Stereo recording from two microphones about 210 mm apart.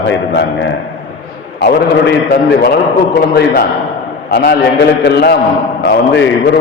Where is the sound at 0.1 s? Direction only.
60° left (ahead or behind).